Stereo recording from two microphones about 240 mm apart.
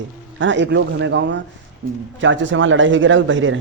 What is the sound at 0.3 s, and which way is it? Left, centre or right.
Speech, right.